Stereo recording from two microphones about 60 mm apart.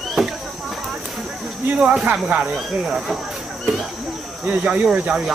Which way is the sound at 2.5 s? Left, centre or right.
Centre.